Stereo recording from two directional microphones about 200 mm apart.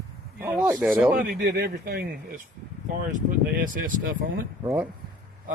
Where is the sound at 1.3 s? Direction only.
55° right (ahead or behind).